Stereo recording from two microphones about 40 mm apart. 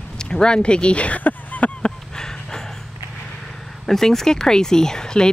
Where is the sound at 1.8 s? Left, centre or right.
Centre.